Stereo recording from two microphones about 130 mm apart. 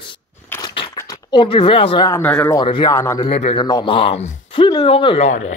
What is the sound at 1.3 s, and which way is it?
Speech, 40° left (ahead or behind).